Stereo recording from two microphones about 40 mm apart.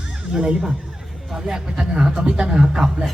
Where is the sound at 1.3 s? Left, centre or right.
Centre.